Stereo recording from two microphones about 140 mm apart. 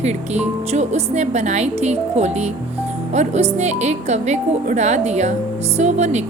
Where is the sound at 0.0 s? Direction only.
55° right (ahead or behind).